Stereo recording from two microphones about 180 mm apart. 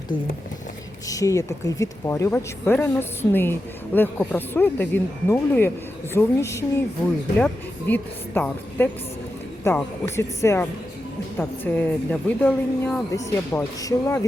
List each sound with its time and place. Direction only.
1.0 s speech: 20° left (ahead or behind)